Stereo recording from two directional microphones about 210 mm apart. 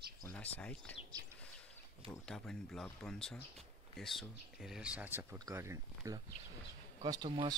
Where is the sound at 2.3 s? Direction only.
5° left (ahead or behind).